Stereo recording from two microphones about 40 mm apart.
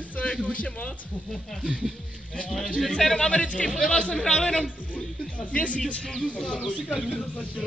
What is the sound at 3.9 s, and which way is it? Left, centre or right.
Speech, centre.